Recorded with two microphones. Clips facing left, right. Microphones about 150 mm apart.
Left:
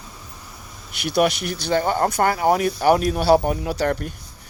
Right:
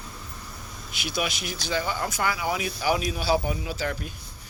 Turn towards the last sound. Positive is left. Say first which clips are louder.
# left 8 dB
turn(degrees=60)  # may be behind; listen again after turning